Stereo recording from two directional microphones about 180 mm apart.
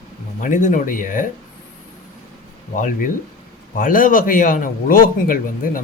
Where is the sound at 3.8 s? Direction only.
50° left (ahead or behind).